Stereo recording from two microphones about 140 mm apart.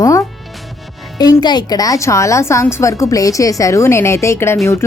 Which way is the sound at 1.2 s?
30° left (ahead or behind).